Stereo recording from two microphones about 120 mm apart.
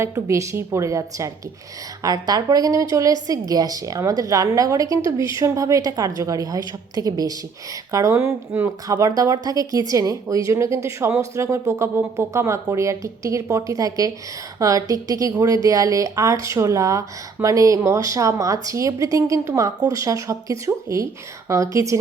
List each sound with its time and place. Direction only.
0.0 s a woman's voice: 25° right (ahead or behind)